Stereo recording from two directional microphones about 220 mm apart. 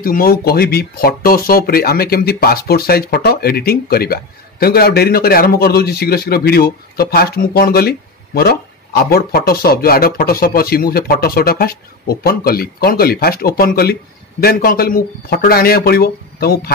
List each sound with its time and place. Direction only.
0.0 s speech: 40° left (ahead or behind)